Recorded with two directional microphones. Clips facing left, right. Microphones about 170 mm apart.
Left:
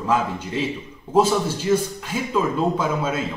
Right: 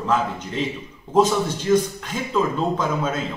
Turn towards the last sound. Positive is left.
turn(degrees=10)  # may be behind; listen again after turning